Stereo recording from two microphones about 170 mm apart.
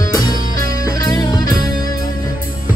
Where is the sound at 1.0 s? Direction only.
25° left (ahead or behind).